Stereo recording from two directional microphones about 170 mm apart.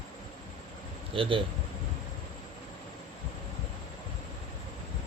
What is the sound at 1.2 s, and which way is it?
Speech, 30° right (ahead or behind).